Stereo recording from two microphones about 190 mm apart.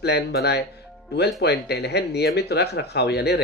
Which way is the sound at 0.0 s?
60° left (ahead or behind).